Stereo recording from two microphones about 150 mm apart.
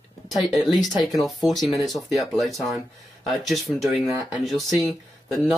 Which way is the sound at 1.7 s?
Centre (ahead or behind).